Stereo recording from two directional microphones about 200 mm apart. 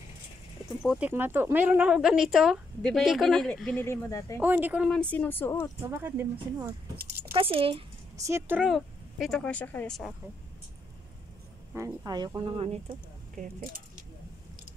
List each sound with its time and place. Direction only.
0.8 s speech: 5° right (ahead or behind); by 4.4 s 15° left (ahead or behind)
4.4 s speech: 10° right (ahead or behind)
5.1 s speech: 10° left (ahead or behind)
5.8 s speech: 10° right (ahead or behind)
7.3 s speech: 25° right (ahead or behind)
8.3 s speech: 10° right (ahead or behind)
11.7 s speech: 15° right (ahead or behind)
13.4 s speech: 45° right (ahead or behind)